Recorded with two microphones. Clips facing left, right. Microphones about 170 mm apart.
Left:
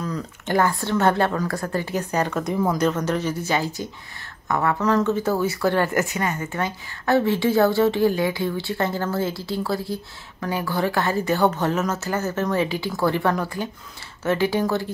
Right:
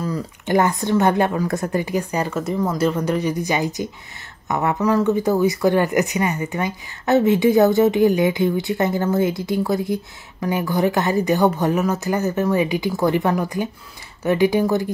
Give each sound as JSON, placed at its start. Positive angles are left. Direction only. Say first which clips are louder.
{"t": 0.0, "sound": "speech", "louder": "right 3 dB", "side_deg": -10}